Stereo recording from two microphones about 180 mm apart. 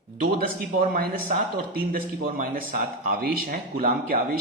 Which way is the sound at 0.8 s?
45° right (ahead or behind).